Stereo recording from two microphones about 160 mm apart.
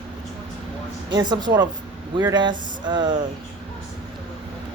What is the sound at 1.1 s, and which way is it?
Speech, 25° right (ahead or behind).